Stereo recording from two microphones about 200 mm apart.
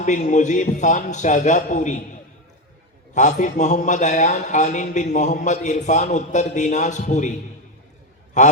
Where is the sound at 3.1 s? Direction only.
35° left (ahead or behind).